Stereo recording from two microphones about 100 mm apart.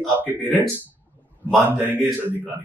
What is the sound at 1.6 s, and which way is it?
Speech, 20° right (ahead or behind).